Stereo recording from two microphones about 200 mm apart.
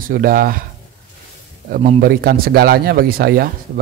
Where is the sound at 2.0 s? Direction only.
50° right (ahead or behind).